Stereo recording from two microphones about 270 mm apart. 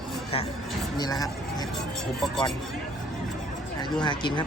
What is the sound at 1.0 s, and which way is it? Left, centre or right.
Speech, centre.